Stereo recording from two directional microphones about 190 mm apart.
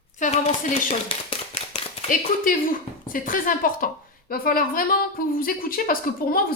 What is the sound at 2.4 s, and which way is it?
A woman's voice, 45° left (ahead or behind).